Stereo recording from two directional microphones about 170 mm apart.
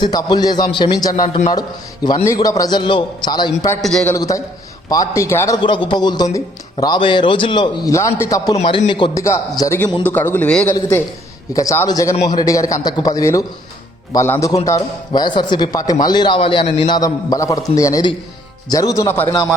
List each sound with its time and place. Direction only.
0.0 s a man's voice: 25° left (ahead or behind)
3.8 s a man's voice: centre (ahead or behind)
4.1 s a man's voice: 20° left (ahead or behind)
5.5 s a man's voice: 30° left (ahead or behind)
8.5 s a man's voice: 30° left (ahead or behind); by 10.8 s 5° left (ahead or behind)
10.8 s a man's voice: 20° left (ahead or behind)